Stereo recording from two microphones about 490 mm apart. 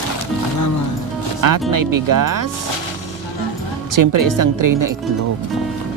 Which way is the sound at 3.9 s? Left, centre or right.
Right.